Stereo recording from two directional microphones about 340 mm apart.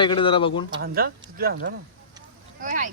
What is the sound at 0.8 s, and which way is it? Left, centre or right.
Speech, right.